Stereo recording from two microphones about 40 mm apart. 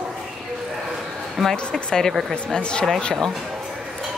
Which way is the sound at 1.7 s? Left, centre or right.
Centre.